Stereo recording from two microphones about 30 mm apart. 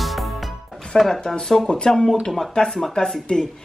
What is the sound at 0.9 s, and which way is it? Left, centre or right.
Speech, left.